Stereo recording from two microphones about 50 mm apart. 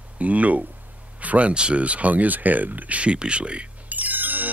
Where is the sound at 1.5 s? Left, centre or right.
Right.